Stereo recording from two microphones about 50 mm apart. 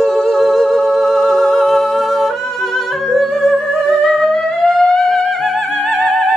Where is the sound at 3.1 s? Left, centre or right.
Centre.